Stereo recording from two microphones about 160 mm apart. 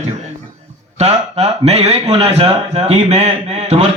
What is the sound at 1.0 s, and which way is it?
A man's voice, 40° right (ahead or behind).